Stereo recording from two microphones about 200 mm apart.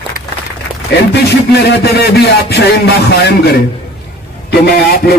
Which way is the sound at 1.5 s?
55° left (ahead or behind).